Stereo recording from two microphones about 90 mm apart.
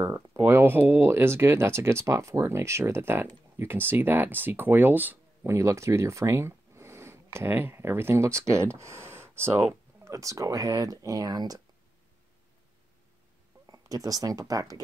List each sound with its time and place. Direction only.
0.0 s a sound: 30° right (ahead or behind)
0.4 s speech: 25° right (ahead or behind)
5.4 s speech: 30° right (ahead or behind)
13.7 s speech: 40° right (ahead or behind)